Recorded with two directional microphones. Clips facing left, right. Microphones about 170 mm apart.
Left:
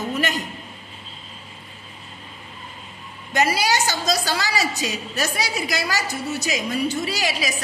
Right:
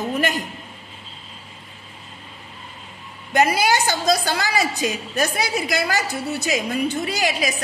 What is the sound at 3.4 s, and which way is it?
A woman's voice, 55° right (ahead or behind).